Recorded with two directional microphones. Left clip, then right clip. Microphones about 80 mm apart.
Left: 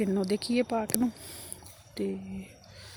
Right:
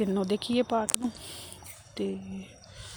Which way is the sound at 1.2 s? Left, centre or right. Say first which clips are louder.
Right 3 dB; left.